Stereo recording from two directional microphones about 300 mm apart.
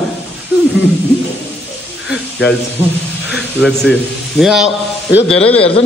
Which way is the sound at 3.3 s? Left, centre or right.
Centre.